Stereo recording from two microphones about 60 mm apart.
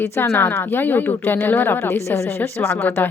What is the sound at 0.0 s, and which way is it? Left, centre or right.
A woman's voice, left.